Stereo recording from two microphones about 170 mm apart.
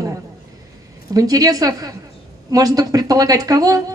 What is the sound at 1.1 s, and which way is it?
Speech, 20° right (ahead or behind).